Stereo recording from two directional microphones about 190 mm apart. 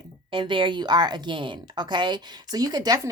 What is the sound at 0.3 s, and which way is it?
A woman's voice, 25° right (ahead or behind).